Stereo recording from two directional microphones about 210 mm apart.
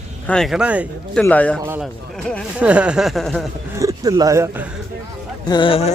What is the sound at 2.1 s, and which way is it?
Speech, 5° left (ahead or behind).